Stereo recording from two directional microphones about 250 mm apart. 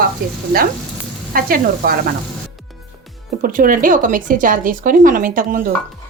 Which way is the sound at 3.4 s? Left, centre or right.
Right.